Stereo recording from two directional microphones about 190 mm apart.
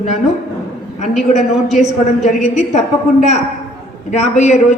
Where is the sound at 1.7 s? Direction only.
35° left (ahead or behind).